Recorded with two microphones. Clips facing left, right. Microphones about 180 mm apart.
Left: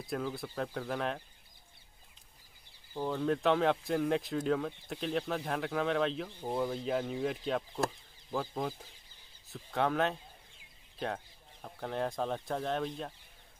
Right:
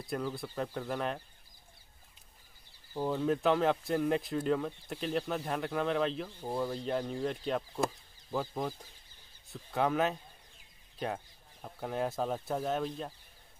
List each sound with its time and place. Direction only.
0.0 s speech: centre (ahead or behind)
2.9 s speech: 10° right (ahead or behind)
6.2 s speech: 15° left (ahead or behind)
6.7 s speech: centre (ahead or behind)
11.6 s speech: 5° right (ahead or behind)